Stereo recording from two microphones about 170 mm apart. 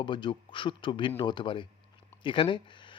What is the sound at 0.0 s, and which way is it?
Speech, 25° left (ahead or behind).